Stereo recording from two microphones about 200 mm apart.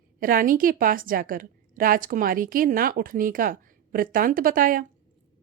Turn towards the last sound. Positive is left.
turn(degrees=-45)  # may be behind; listen again after turning